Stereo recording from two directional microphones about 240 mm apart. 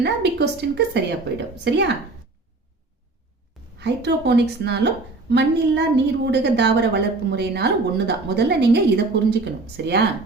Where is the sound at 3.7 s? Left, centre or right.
Right.